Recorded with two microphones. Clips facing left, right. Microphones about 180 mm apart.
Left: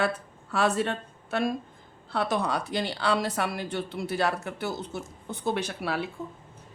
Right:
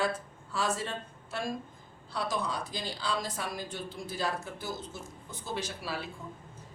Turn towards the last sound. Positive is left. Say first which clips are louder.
# left 6 dB
turn(degrees=60)  # may be behind; listen again after turning